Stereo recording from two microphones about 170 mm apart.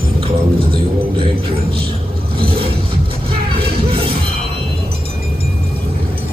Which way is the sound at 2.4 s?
35° right (ahead or behind).